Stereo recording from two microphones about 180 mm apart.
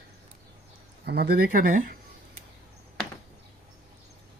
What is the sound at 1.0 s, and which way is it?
Speech, 65° right (ahead or behind).